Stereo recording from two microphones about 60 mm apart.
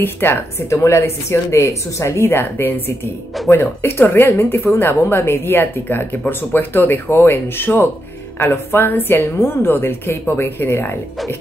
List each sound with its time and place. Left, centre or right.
0.0 s speech: left
0.7 s speech: left